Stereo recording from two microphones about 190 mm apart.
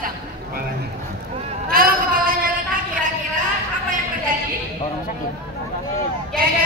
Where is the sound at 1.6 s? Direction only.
50° right (ahead or behind).